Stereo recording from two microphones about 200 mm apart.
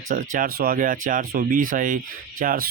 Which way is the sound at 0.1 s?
40° right (ahead or behind).